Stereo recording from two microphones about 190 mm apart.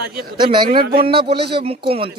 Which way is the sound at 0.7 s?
50° right (ahead or behind).